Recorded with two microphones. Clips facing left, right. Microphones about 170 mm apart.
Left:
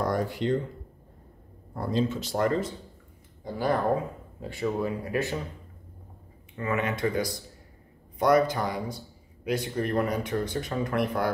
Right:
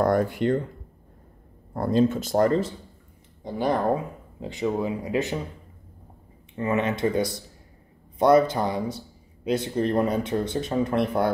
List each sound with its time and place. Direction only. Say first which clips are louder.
0.0 s speech: right 6 dB; 55° right (ahead or behind)
1.7 s speech: right 6 dB; 50° right (ahead or behind); by 2.7 s 35° right (ahead or behind)
3.4 s speech: right 2 dB; 20° right (ahead or behind)
6.5 s speech: right 4 dB; 25° right (ahead or behind)